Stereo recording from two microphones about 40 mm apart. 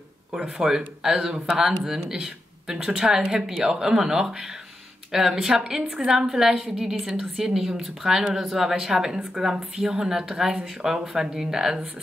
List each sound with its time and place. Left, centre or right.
0.6 s a woman's voice: centre
6.2 s speech: centre